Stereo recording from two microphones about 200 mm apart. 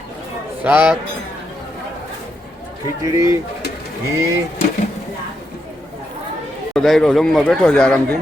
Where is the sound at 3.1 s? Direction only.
15° right (ahead or behind).